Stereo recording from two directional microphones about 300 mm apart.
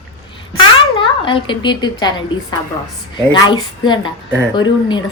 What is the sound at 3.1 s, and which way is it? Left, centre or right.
A woman's voice, centre.